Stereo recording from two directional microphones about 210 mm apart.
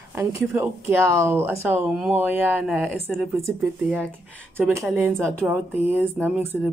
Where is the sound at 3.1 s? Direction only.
Centre (ahead or behind).